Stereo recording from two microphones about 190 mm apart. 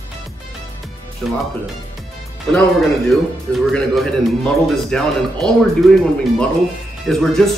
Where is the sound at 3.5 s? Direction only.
Centre (ahead or behind).